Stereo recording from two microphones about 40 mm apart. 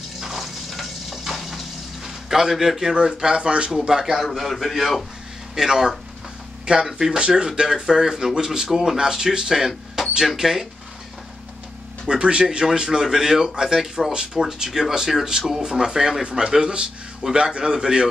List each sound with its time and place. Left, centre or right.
0.2 s frying: centre
2.0 s a sound: centre
2.8 s a man's voice: centre
4.0 s a man's voice: centre
5.6 s a man's voice: centre
9.7 s a sound: centre
10.2 s speech: centre
12.1 s a man's voice: right